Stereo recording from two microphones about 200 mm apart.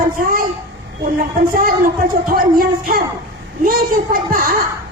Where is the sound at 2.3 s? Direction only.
45° right (ahead or behind).